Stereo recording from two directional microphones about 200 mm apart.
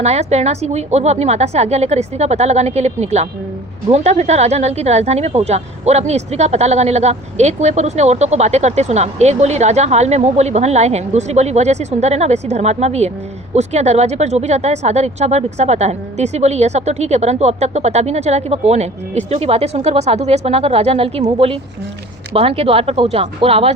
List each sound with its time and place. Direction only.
0.0 s speech: 35° right (ahead or behind)